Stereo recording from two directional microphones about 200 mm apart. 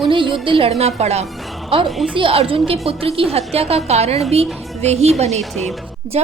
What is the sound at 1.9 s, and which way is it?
Speech, centre (ahead or behind).